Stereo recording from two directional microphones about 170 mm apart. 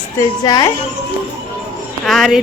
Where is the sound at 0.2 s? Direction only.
20° left (ahead or behind).